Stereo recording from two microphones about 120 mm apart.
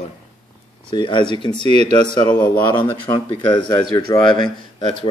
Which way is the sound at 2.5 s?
40° left (ahead or behind).